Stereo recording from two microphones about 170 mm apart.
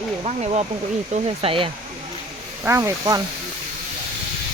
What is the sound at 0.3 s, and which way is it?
Speech, 40° right (ahead or behind).